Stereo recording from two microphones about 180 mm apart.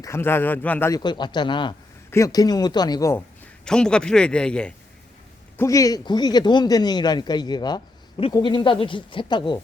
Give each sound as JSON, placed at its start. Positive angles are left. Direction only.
{"t": 0.0, "sound": "speech", "side_deg": 15}
{"t": 3.6, "sound": "a man's voice", "side_deg": 5}
{"t": 5.5, "sound": "speech", "side_deg": 20}